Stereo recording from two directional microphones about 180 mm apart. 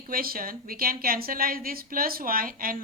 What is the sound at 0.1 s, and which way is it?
A woman's voice, 55° right (ahead or behind).